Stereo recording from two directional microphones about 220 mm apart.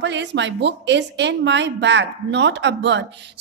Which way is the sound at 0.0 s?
55° right (ahead or behind).